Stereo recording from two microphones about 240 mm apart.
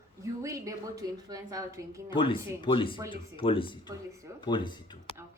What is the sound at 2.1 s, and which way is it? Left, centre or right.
Speech, left.